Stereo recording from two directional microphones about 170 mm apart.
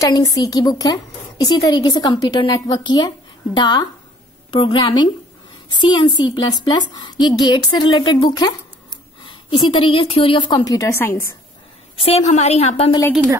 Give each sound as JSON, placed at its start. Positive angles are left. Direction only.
{"t": 0.0, "sound": "a woman's voice", "side_deg": 20}
{"t": 12.0, "sound": "a woman's voice", "side_deg": 40}